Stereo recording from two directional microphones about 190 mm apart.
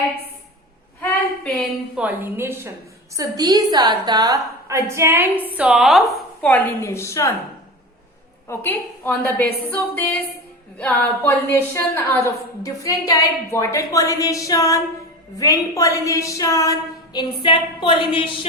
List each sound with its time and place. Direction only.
2.0 s a woman's voice: 10° right (ahead or behind); by 7.3 s 15° left (ahead or behind)
8.4 s a woman's voice: 10° left (ahead or behind); by 18.3 s 25° left (ahead or behind)